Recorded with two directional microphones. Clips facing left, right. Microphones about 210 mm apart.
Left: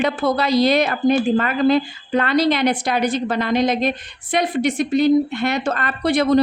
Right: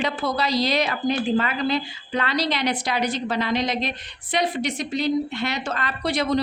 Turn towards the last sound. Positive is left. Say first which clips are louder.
# left 7 dB
turn(degrees=55)  # may be behind; listen again after turning